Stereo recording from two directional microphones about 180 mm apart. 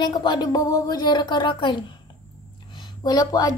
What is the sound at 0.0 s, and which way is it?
A woman's voice, 25° left (ahead or behind).